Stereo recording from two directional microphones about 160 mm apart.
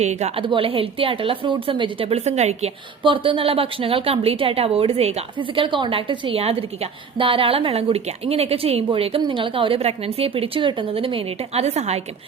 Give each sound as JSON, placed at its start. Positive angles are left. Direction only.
{"t": 0.0, "sound": "a woman's voice", "side_deg": -45}